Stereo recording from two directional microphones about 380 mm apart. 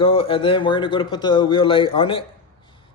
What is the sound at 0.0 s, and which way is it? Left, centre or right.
Speech, centre.